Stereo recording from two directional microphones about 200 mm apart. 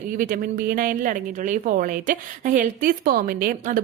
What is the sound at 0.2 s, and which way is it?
Speech, 45° right (ahead or behind).